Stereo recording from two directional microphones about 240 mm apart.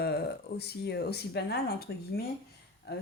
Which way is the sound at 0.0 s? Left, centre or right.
Left.